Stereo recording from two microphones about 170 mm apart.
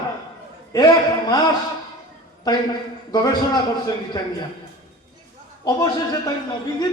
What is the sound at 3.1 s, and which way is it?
A man's voice, 20° left (ahead or behind).